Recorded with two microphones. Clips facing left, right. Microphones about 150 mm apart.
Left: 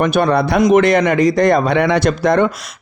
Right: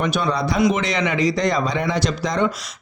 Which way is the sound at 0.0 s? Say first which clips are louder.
Left 7 dB; 55° left (ahead or behind).